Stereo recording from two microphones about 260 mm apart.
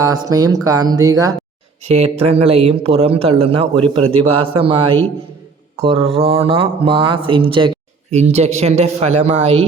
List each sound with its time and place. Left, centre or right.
0.0 s speech: centre